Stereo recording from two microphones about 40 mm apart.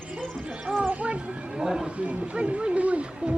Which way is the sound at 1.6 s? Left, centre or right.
Centre.